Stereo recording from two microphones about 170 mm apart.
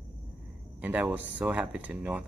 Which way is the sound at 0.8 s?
10° right (ahead or behind).